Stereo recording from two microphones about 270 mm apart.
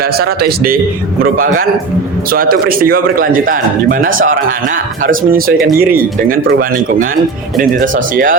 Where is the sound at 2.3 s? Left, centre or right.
Right.